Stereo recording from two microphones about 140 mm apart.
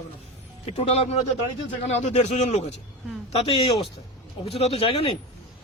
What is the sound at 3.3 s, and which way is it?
A man's voice, 40° left (ahead or behind).